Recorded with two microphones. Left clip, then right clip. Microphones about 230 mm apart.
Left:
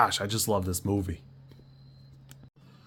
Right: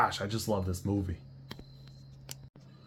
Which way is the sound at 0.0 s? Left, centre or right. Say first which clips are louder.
Left 4 dB; left.